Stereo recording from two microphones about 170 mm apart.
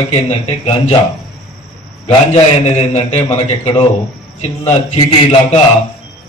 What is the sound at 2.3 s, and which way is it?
A man's voice, 40° left (ahead or behind).